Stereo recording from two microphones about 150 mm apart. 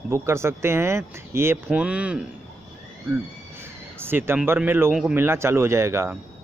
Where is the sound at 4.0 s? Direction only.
15° right (ahead or behind).